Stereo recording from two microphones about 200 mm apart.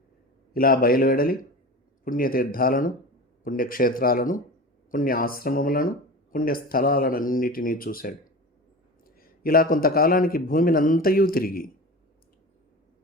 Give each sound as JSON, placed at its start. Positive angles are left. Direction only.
{"t": 0.5, "sound": "speech", "side_deg": 45}